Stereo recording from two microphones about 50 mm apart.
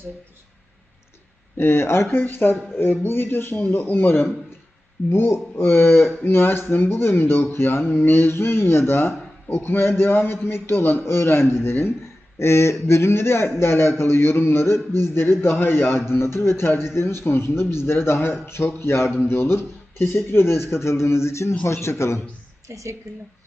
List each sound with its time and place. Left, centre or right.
1.5 s a man's voice: left
2.0 s speech: left
12.4 s a man's voice: left
22.7 s a woman's voice: right
23.1 s a woman's voice: right